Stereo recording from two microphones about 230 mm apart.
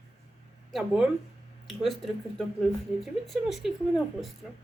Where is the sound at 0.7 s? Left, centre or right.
Centre.